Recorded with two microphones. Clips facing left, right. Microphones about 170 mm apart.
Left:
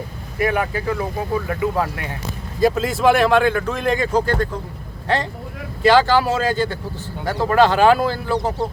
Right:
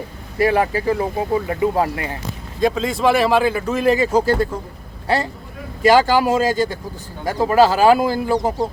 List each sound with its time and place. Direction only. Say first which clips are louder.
0.3 s speech: right 4 dB; 30° right (ahead or behind)
2.6 s a man's voice: left 1 dB; 5° left (ahead or behind)